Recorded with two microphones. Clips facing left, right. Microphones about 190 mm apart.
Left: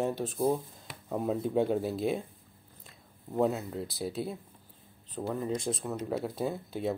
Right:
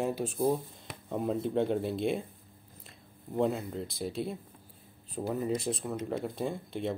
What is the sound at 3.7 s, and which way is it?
Speech, 5° left (ahead or behind).